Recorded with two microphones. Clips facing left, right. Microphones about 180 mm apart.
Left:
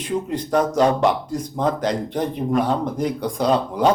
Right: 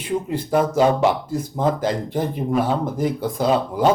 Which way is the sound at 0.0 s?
5° right (ahead or behind).